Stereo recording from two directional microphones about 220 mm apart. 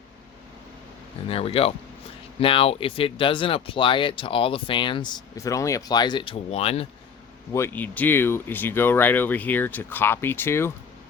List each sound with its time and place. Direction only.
1.3 s speech: 25° left (ahead or behind)
7.5 s speech: 10° left (ahead or behind)